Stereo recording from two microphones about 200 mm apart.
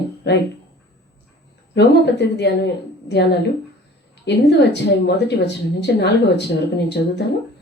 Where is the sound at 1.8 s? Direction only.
60° left (ahead or behind).